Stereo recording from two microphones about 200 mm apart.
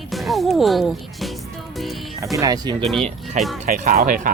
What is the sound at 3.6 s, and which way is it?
Speech, 40° right (ahead or behind).